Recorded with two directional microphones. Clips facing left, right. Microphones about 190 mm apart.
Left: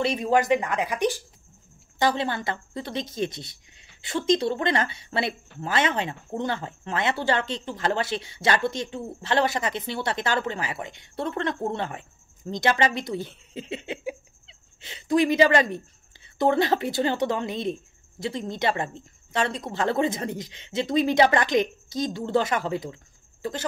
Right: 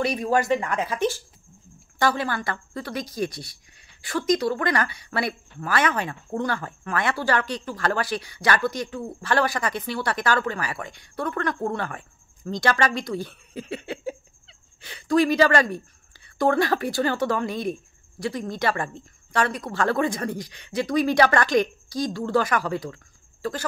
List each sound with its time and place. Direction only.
0.0 s a woman's voice: 25° left (ahead or behind)